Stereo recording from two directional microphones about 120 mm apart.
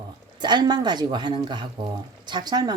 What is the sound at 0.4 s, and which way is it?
Speech, 35° right (ahead or behind).